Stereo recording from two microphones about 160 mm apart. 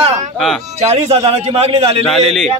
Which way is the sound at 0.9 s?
40° right (ahead or behind).